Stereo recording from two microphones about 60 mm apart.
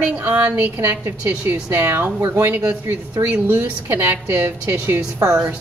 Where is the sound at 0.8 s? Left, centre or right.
Right.